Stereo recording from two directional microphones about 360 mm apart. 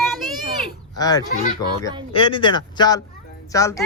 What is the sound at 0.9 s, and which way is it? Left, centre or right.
Speech, centre.